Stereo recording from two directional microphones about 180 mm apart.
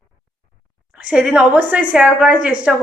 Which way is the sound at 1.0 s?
5° right (ahead or behind).